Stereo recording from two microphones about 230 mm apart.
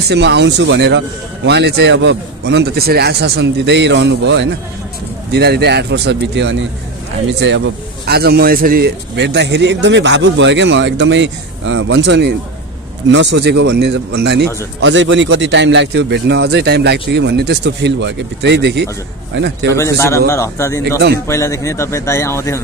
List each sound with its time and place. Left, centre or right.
0.1 s a man's voice: right
19.7 s a man's voice: centre